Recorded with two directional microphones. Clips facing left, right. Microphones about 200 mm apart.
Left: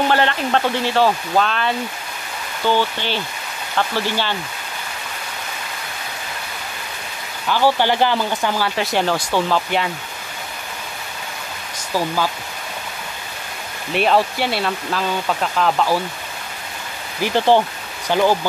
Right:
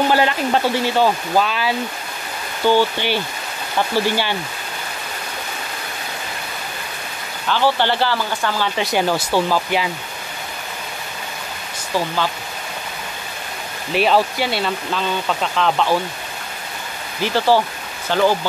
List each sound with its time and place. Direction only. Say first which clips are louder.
0.1 s speech: right 1 dB; 5° right (ahead or behind)
7.4 s speech: left 1 dB; 10° left (ahead or behind)
8.7 s speech: right 1 dB; 5° right (ahead or behind)
13.9 s speech: right 1 dB; centre (ahead or behind)
17.2 s speech: left 1 dB; 20° left (ahead or behind)